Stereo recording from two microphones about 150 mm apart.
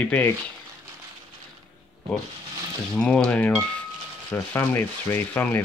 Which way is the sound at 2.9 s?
5° left (ahead or behind).